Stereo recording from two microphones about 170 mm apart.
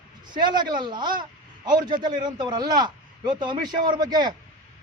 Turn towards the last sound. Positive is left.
turn(degrees=-25)  # may be behind; listen again after turning